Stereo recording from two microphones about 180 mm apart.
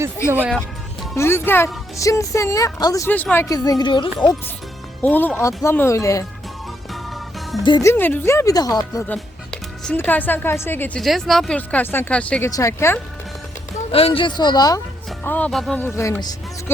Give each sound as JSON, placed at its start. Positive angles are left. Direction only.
{"t": 0.3, "sound": "speech", "side_deg": -10}
{"t": 1.1, "sound": "speech", "side_deg": 15}
{"t": 3.5, "sound": "speech", "side_deg": 20}
{"t": 5.0, "sound": "speech", "side_deg": 10}
{"t": 7.6, "sound": "speech", "side_deg": 20}
{"t": 9.0, "sound": "speech", "side_deg": 5}
{"t": 12.5, "sound": "speech", "side_deg": 20}
{"t": 13.9, "sound": "speech", "side_deg": 30}
{"t": 15.2, "sound": "speech", "side_deg": 10}